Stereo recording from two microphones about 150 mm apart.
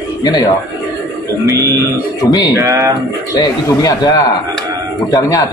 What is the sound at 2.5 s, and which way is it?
Speech, 20° right (ahead or behind).